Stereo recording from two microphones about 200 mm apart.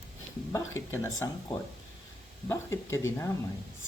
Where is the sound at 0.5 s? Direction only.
15° left (ahead or behind).